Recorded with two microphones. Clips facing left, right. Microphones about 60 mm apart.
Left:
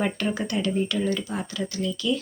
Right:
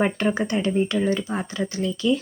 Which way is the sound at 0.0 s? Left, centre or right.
Right.